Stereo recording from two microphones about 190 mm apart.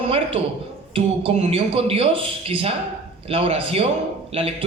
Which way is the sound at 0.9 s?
30° right (ahead or behind).